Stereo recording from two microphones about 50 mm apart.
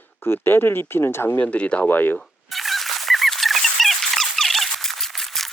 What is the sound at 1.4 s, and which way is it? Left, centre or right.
Speech, left.